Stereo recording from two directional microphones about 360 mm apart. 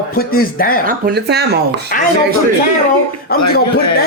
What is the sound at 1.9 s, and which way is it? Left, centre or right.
Speech, left.